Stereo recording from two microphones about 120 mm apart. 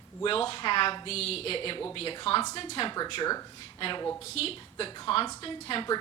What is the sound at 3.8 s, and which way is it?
Speech, 45° left (ahead or behind).